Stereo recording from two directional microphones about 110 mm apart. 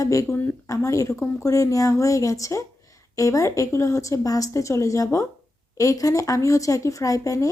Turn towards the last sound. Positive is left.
turn(degrees=30)  # may be behind; listen again after turning